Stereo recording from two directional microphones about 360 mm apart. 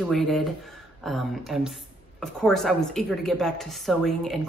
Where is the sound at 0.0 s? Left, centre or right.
Centre.